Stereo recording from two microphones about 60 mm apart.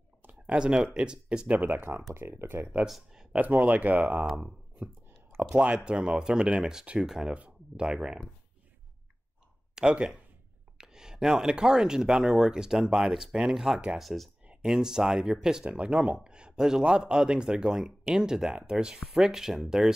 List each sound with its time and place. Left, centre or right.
0.5 s speech: centre
1.6 s speech: right
2.9 s speech: centre
3.3 s speech: right
5.4 s speech: right
9.8 s speech: centre
14.4 s a sound: right
14.7 s speech: centre